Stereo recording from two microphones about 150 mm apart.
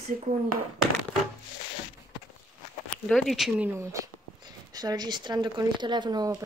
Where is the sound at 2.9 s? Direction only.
5° left (ahead or behind).